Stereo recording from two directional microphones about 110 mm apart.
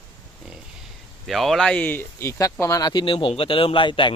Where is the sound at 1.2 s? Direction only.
Centre (ahead or behind); by 4.1 s 50° left (ahead or behind).